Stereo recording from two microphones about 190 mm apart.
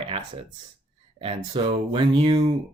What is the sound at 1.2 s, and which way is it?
Speech, 30° right (ahead or behind).